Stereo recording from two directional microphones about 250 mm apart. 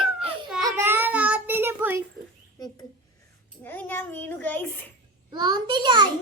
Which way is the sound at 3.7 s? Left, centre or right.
Centre.